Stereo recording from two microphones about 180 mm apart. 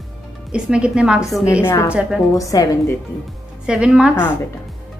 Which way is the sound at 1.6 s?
15° left (ahead or behind).